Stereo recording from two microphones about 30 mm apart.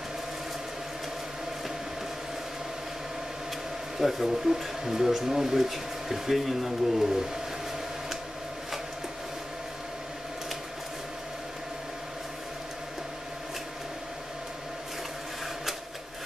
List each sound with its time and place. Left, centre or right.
4.0 s speech: centre